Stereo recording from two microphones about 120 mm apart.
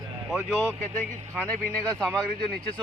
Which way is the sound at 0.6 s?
15° left (ahead or behind).